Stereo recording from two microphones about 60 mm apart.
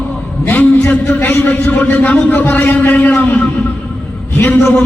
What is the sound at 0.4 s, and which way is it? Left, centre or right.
A man's voice, left.